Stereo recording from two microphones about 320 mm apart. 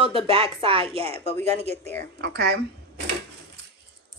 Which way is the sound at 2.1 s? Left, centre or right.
Right.